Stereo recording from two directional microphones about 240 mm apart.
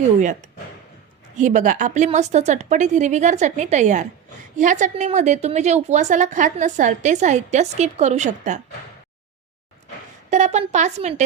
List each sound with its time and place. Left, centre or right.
1.4 s a woman's voice: right
10.2 s a woman's voice: right